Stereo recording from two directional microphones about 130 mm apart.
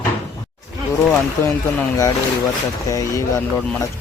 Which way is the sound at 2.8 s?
25° left (ahead or behind).